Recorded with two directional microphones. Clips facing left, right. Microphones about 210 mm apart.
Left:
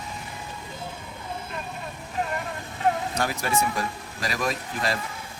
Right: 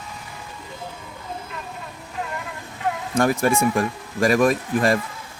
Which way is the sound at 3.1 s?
50° right (ahead or behind).